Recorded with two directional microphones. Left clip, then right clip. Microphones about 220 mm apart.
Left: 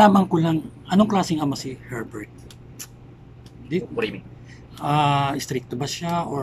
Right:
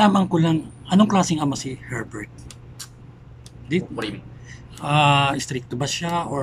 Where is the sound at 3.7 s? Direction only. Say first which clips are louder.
Left 1 dB; centre (ahead or behind).